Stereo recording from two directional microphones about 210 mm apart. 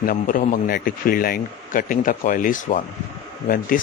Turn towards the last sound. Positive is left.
turn(degrees=45)  # may be behind; listen again after turning